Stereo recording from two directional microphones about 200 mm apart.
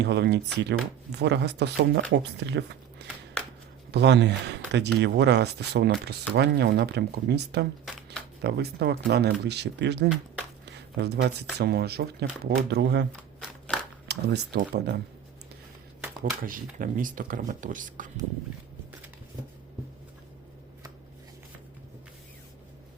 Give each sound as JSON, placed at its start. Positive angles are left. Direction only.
{"t": 0.0, "sound": "speech", "side_deg": -60}
{"t": 7.9, "sound": "speech", "side_deg": 0}
{"t": 8.4, "sound": "speech", "side_deg": -55}
{"t": 10.7, "sound": "a sound", "side_deg": -55}
{"t": 11.6, "sound": "speech", "side_deg": -55}
{"t": 14.1, "sound": "speech", "side_deg": -55}
{"t": 16.4, "sound": "speech", "side_deg": -45}